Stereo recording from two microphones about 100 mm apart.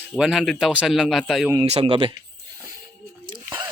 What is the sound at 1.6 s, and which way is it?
Speech, 80° right.